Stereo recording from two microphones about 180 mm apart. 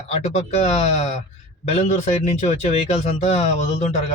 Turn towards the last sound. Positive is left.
turn(degrees=40)  # may be behind; listen again after turning